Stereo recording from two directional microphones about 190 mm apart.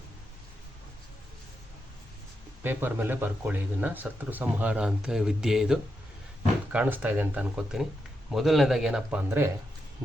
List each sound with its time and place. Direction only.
2.6 s speech: 10° right (ahead or behind)